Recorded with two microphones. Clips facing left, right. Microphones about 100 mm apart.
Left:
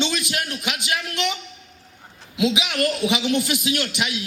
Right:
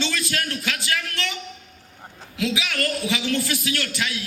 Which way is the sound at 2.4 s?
20° left (ahead or behind).